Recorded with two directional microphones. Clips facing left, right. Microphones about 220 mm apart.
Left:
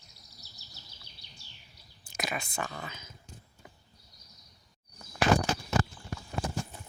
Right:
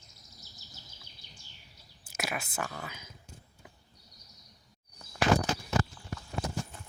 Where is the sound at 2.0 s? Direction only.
5° right (ahead or behind).